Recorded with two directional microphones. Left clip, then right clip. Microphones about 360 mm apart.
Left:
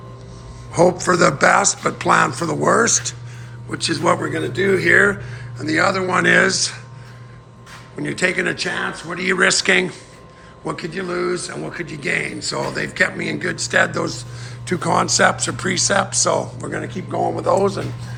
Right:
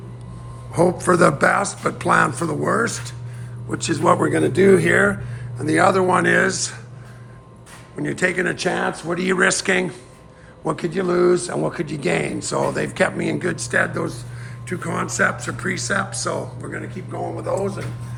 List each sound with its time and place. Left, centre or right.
0.7 s speech: centre
3.7 s speech: centre
7.9 s speech: centre